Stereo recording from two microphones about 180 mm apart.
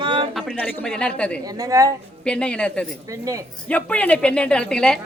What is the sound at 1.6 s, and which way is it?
Speech, 20° right (ahead or behind).